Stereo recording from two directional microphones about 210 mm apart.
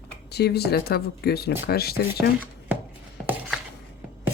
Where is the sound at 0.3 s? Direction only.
50° left (ahead or behind).